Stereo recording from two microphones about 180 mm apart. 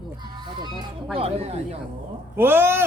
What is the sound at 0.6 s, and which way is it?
Speech, 25° right (ahead or behind).